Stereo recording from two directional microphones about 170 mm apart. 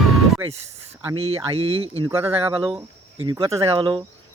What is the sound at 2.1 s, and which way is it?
Speech, 15° right (ahead or behind).